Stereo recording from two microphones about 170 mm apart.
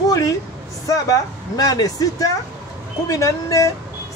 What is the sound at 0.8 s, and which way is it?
Speech, 20° left (ahead or behind).